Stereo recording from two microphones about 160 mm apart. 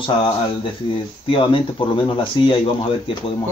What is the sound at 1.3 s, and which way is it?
Speech, 35° left (ahead or behind).